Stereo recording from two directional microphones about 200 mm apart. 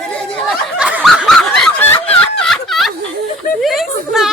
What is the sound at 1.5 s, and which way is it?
Snicker, 5° left (ahead or behind).